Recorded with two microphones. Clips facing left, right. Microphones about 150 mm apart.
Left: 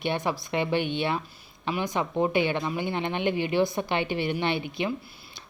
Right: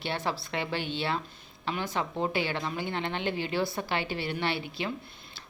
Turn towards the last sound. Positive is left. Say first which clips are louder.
# left 4 dB
turn(degrees=20)  # may be behind; listen again after turning